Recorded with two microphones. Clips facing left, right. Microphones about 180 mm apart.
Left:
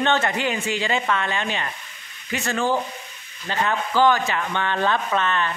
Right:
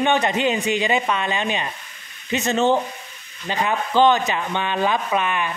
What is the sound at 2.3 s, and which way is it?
Sizzle, 20° right (ahead or behind).